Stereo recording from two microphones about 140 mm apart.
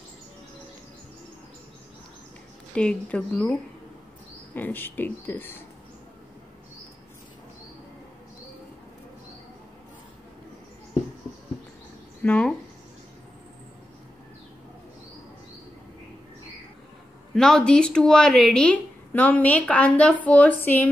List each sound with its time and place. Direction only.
2.7 s a woman's voice: 5° left (ahead or behind)
4.6 s a woman's voice: 15° left (ahead or behind)
12.2 s a sound: 10° left (ahead or behind)
17.3 s a woman's voice: 5° left (ahead or behind)